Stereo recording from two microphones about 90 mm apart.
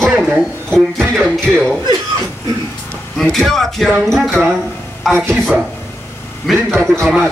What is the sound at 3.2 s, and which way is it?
Speech, centre (ahead or behind).